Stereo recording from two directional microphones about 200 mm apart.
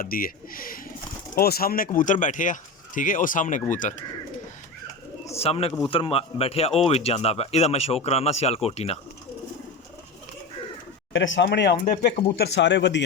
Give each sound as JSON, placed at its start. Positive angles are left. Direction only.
{"t": 0.0, "sound": "speech", "side_deg": 45}
{"t": 5.2, "sound": "bird", "side_deg": 30}
{"t": 5.9, "sound": "speech", "side_deg": 30}
{"t": 11.1, "sound": "speech", "side_deg": 70}
{"t": 11.4, "sound": "speech", "side_deg": 55}